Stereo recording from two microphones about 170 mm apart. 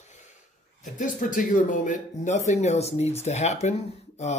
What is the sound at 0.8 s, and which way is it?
Speech, 50° left (ahead or behind).